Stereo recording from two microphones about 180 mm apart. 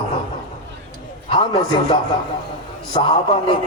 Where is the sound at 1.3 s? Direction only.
25° left (ahead or behind).